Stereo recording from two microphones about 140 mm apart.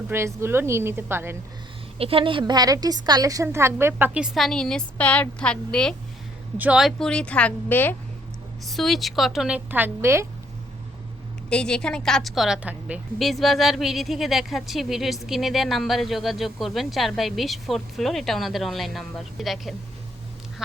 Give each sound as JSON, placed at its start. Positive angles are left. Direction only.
{"t": 0.1, "sound": "a woman's voice", "side_deg": -20}
{"t": 2.0, "sound": "a woman's voice", "side_deg": -40}
{"t": 4.4, "sound": "speech", "side_deg": 5}
{"t": 6.6, "sound": "a woman's voice", "side_deg": -5}
{"t": 8.7, "sound": "speech", "side_deg": 0}
{"t": 11.4, "sound": "speech", "side_deg": 5}